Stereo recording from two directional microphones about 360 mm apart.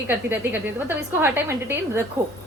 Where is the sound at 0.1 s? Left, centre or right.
Centre.